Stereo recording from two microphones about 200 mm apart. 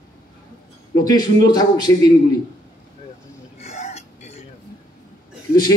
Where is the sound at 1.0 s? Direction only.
20° left (ahead or behind).